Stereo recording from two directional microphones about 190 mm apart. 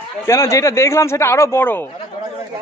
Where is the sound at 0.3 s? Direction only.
15° left (ahead or behind).